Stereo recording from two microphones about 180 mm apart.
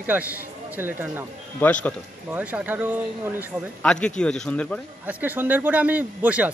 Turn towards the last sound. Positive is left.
turn(degrees=-10)  # may be behind; listen again after turning